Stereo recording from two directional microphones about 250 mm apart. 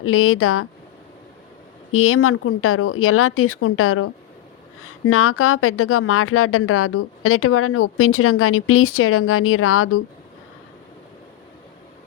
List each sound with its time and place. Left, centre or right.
0.0 s speech: left
1.9 s speech: left